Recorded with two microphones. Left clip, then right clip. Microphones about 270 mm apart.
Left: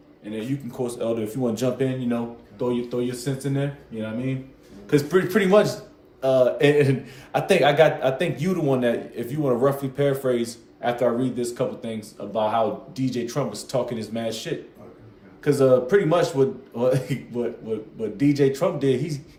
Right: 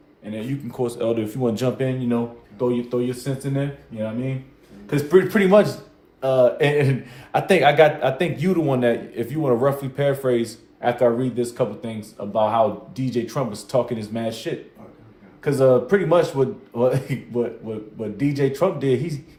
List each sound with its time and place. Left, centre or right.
0.7 s a man's voice: right